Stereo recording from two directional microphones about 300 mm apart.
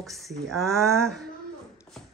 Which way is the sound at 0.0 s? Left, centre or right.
Centre.